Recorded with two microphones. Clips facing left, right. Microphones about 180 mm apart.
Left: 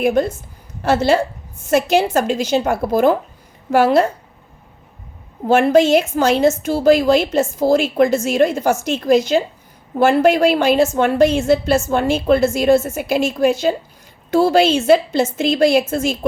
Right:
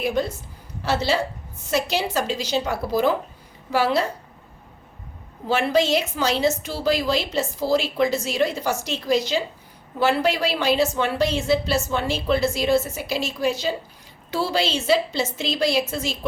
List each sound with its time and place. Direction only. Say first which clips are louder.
0.0 s a woman's voice: left 7 dB; 50° left (ahead or behind)
5.5 s a woman's voice: left 8 dB; 50° left (ahead or behind)